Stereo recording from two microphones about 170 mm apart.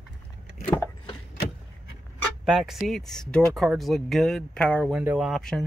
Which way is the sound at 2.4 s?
Centre (ahead or behind).